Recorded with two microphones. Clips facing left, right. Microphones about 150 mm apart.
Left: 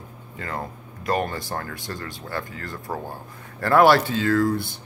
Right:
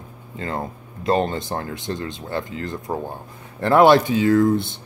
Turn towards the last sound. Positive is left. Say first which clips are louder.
# right 4 dB
turn(degrees=-20)  # may be behind; listen again after turning